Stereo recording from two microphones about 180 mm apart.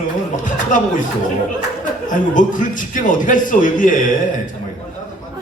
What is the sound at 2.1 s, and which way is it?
A man's voice, 45° left (ahead or behind).